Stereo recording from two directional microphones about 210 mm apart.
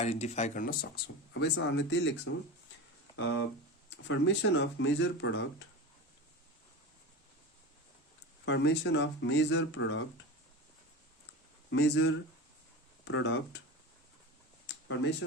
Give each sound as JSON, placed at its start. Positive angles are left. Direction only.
{"t": 0.0, "sound": "speech", "side_deg": 30}
{"t": 1.3, "sound": "speech", "side_deg": 55}
{"t": 8.4, "sound": "speech", "side_deg": 55}
{"t": 11.7, "sound": "speech", "side_deg": 60}